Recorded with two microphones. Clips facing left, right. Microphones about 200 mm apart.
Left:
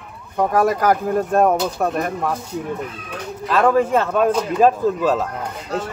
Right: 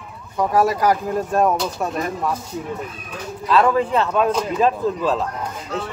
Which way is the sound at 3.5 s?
50° left (ahead or behind).